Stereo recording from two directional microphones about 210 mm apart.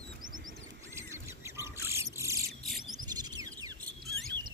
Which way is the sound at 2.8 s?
20° right (ahead or behind).